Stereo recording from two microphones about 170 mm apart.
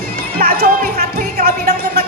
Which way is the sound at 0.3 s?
60° right (ahead or behind).